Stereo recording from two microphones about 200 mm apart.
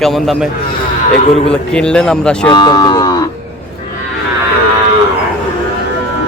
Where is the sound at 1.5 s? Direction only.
5° left (ahead or behind).